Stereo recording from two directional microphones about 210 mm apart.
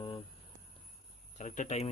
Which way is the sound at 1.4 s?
35° left (ahead or behind).